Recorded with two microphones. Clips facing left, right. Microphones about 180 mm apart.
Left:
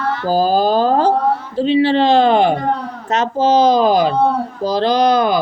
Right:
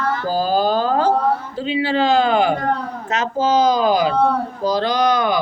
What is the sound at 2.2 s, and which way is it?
Speech, 30° left (ahead or behind).